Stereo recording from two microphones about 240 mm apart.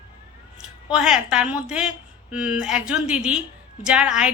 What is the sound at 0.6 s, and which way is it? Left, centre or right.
A woman's voice, centre.